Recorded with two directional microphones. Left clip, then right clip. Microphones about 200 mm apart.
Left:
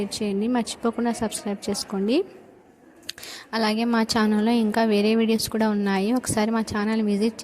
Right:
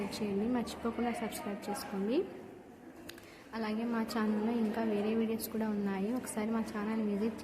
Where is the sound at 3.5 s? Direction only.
50° left (ahead or behind).